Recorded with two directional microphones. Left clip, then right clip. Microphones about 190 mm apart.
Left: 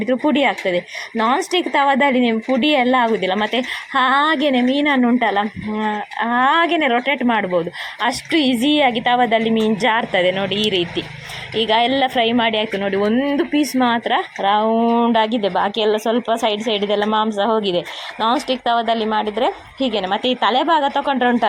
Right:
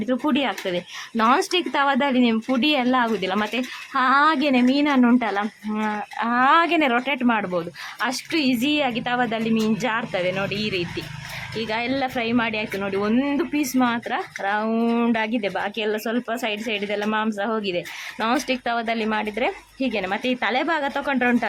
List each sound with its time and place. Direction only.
0.1 s speech: 5° left (ahead or behind)
17.6 s speech: 25° right (ahead or behind)
18.6 s speech: centre (ahead or behind)